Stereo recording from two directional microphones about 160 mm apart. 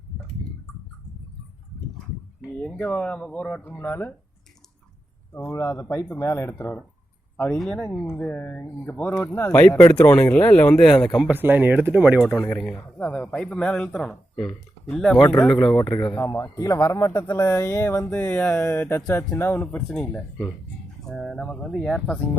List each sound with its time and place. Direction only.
2.6 s speech: 10° left (ahead or behind)
5.5 s speech: 20° left (ahead or behind); by 11.3 s centre (ahead or behind)
11.3 s speech: 10° right (ahead or behind)
12.3 s speech: 5° left (ahead or behind)
16.1 s speech: 15° left (ahead or behind)